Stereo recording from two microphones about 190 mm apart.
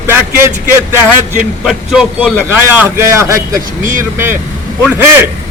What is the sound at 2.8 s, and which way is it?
Speech, 15° right (ahead or behind).